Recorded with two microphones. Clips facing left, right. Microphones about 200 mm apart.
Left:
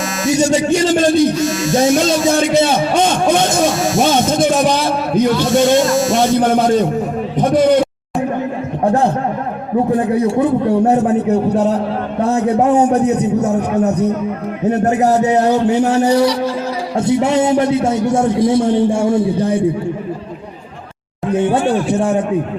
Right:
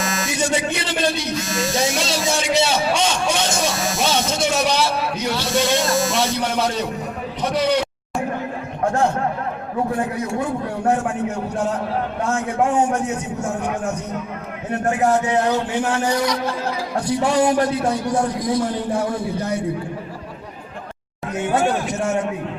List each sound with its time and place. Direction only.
0.3 s speech: 40° left (ahead or behind)
8.8 s a sound: 35° left (ahead or behind)
9.9 s a man's voice: 35° left (ahead or behind)
21.5 s a man's voice: 30° left (ahead or behind)